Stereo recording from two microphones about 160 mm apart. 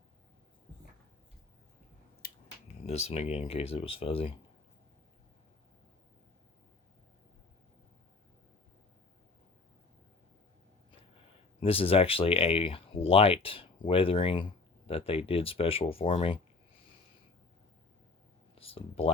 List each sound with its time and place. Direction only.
2.2 s a sound: 70° left (ahead or behind)
2.8 s speech: 40° left (ahead or behind)
11.6 s speech: 35° left (ahead or behind)
18.6 s speech: 35° left (ahead or behind)